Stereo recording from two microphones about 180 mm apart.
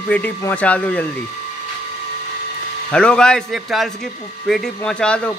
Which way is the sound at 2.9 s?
5° left (ahead or behind).